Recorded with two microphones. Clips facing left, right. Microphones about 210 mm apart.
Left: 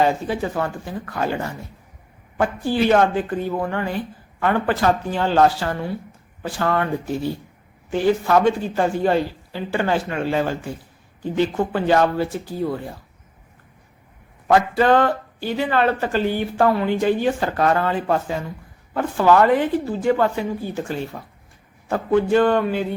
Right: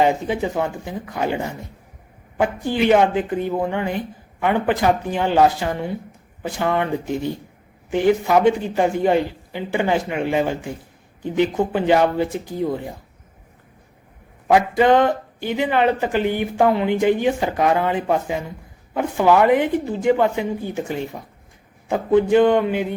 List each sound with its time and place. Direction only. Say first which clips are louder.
0.0 s a man's voice: right 1 dB; 20° right (ahead or behind)
14.4 s a man's voice: right 1 dB; 15° right (ahead or behind)